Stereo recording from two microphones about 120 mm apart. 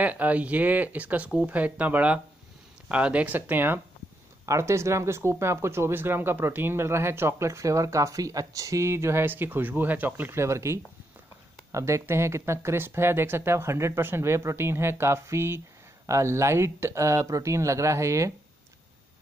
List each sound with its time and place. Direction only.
0.0 s speech: 10° right (ahead or behind)